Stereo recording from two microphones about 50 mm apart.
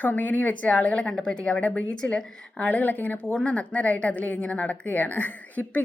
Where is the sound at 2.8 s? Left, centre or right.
Left.